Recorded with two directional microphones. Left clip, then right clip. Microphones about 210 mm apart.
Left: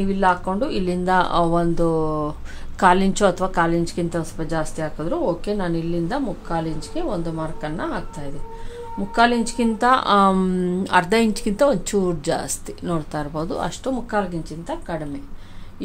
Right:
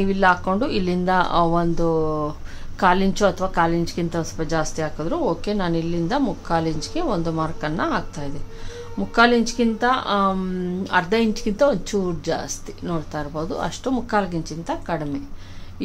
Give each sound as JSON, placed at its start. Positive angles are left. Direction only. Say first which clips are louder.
{"t": 0.0, "sound": "a woman's voice", "louder": "right 1 dB", "side_deg": -5}
{"t": 9.1, "sound": "speech", "louder": "right 1 dB", "side_deg": -5}
{"t": 9.8, "sound": "a woman's voice", "louder": "left 5 dB", "side_deg": 20}
{"t": 14.1, "sound": "a woman's voice", "louder": "right 3 dB", "side_deg": -20}